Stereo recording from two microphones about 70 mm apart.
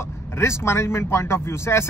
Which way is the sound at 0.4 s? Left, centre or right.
Left.